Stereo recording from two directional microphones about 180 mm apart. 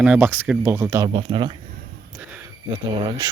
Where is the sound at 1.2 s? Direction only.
30° right (ahead or behind).